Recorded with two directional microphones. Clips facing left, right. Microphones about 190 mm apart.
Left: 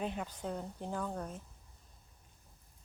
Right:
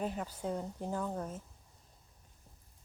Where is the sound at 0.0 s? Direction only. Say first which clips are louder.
Right 1 dB; 5° right (ahead or behind).